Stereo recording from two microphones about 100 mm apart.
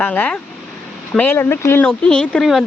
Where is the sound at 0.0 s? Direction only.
15° left (ahead or behind).